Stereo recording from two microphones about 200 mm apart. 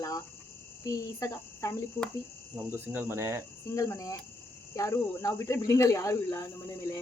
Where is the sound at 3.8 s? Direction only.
15° left (ahead or behind).